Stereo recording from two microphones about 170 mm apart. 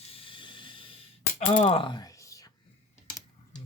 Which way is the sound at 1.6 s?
30° left (ahead or behind).